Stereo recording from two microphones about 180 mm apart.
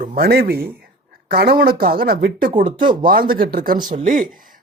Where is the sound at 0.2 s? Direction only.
60° right (ahead or behind).